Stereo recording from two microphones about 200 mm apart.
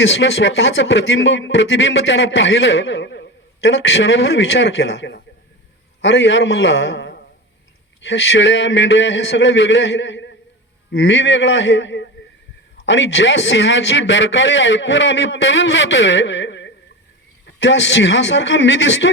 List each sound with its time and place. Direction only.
0.0 s speech: 60° left (ahead or behind)